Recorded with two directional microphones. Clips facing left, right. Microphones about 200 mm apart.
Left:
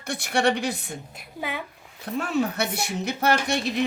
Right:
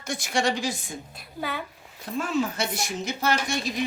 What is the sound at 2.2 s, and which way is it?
Speech, 60° left (ahead or behind).